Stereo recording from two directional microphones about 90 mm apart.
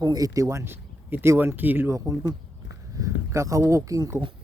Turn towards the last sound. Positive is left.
turn(degrees=-40)  # may be behind; listen again after turning